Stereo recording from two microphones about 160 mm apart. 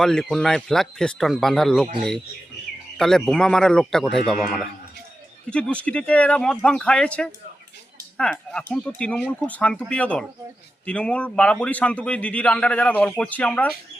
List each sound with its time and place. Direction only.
0.0 s a man's voice: 5° left (ahead or behind)
3.0 s a man's voice: 5° left (ahead or behind)
5.5 s a man's voice: 5° left (ahead or behind)